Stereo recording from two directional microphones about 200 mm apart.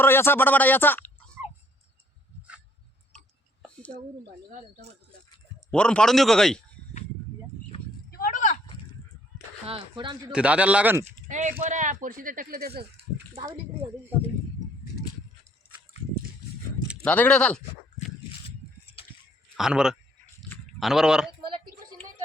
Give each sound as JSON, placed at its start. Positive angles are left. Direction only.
{"t": 0.0, "sound": "speech", "side_deg": 10}
{"t": 5.7, "sound": "speech", "side_deg": 5}
{"t": 8.1, "sound": "a sound", "side_deg": 45}
{"t": 9.6, "sound": "speech", "side_deg": -25}
{"t": 10.3, "sound": "a man's voice", "side_deg": -5}
{"t": 11.3, "sound": "speech", "side_deg": -35}
{"t": 13.3, "sound": "speech", "side_deg": -25}
{"t": 17.0, "sound": "speech", "side_deg": 5}
{"t": 18.3, "sound": "a sound", "side_deg": 25}
{"t": 19.5, "sound": "speech", "side_deg": -5}